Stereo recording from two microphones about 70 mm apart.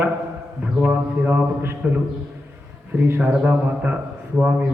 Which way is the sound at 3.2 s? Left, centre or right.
Centre.